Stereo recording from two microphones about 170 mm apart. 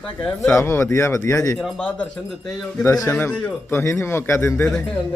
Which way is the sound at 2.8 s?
15° left (ahead or behind).